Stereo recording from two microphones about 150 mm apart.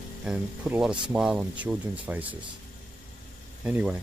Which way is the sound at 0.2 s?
5° right (ahead or behind).